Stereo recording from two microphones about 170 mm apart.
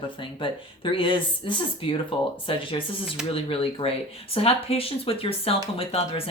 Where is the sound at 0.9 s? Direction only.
30° left (ahead or behind).